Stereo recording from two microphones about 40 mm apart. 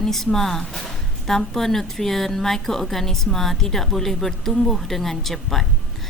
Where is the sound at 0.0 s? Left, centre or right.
Centre.